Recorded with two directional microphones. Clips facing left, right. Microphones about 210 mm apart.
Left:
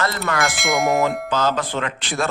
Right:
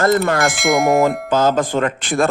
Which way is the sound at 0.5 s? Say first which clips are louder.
Right 4 dB; centre (ahead or behind).